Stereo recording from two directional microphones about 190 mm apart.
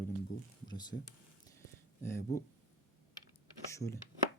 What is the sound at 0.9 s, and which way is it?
Speech, 75° left (ahead or behind).